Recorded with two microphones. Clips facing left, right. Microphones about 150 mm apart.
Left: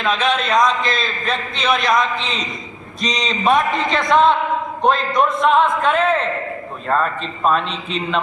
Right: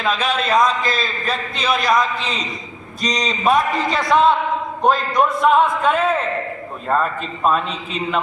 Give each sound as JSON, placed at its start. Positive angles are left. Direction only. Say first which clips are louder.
{"t": 0.0, "sound": "a man's voice", "louder": "left 1 dB", "side_deg": -5}